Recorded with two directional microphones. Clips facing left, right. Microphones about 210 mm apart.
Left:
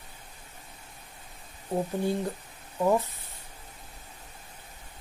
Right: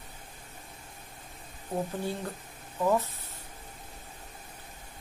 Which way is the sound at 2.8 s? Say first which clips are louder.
Left 2 dB; 15° left (ahead or behind).